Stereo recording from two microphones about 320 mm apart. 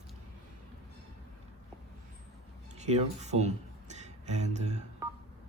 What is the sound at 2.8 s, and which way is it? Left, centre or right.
Speech, right.